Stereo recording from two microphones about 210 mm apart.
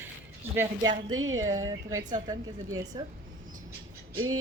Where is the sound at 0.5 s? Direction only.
15° right (ahead or behind).